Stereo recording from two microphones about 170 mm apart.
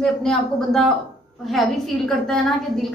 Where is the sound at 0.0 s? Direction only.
5° left (ahead or behind).